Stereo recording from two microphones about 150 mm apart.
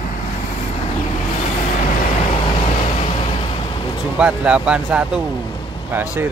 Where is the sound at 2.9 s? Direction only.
40° left (ahead or behind).